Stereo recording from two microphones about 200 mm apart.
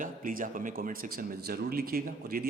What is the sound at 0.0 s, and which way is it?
Speech, 45° right (ahead or behind).